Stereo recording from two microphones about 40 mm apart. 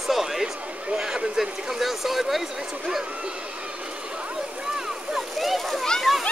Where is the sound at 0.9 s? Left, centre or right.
Right.